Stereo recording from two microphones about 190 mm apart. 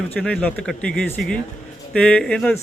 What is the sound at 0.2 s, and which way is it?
Speech, 5° left (ahead or behind).